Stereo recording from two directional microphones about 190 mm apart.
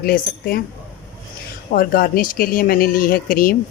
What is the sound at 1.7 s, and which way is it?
Speech, 50° left (ahead or behind).